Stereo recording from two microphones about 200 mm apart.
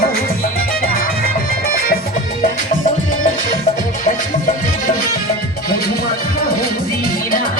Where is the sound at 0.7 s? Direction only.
45° left (ahead or behind).